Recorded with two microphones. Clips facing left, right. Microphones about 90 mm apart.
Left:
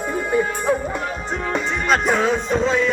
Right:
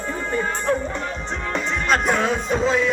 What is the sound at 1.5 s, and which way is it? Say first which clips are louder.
Music: left 1 dB; centre (ahead or behind).